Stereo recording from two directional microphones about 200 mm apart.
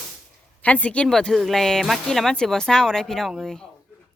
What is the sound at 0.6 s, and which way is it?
A woman's voice, 5° left (ahead or behind).